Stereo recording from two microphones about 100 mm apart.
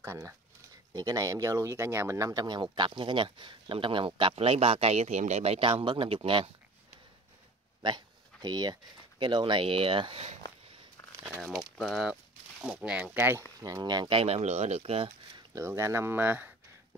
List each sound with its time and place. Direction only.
0.0 s speech: 25° right (ahead or behind); by 6.5 s 60° right (ahead or behind)
7.8 s a sound: 45° right (ahead or behind)
9.2 s speech: 55° right (ahead or behind); by 10.4 s 80° right
11.3 s speech: 5° left (ahead or behind)
12.6 s speech: 10° right (ahead or behind)
13.6 s speech: 35° right (ahead or behind); by 15.0 s 80° right
15.5 s speech: 30° right (ahead or behind)